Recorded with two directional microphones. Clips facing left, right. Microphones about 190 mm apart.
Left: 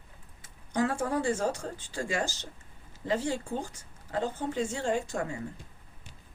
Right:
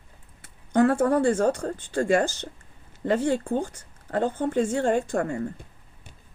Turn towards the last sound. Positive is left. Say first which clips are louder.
# right 6 dB
turn(degrees=-55)  # may be behind; listen again after turning